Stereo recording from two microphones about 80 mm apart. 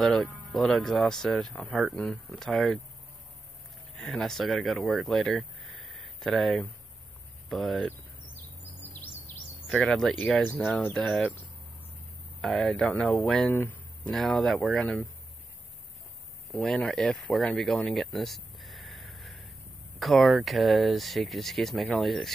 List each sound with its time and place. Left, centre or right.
0.0 s speech: centre
4.0 s speech: centre
8.9 s bird vocalization: left
9.7 s speech: centre
12.4 s speech: centre
13.5 s speech: left
14.0 s speech: centre
16.5 s speech: centre
17.6 s a sound: centre
20.0 s speech: centre